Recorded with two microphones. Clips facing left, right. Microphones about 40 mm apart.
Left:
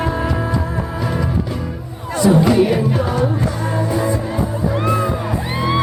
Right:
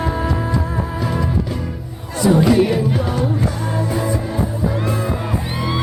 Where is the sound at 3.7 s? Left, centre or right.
Centre.